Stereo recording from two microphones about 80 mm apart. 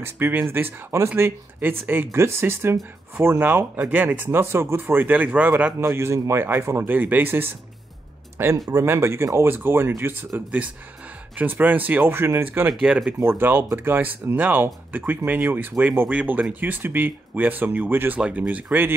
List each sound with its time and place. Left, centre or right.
0.0 s speech: right
5.8 s speech: right
6.9 s speech: right